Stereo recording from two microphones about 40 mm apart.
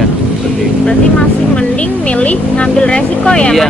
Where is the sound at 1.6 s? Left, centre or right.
Left.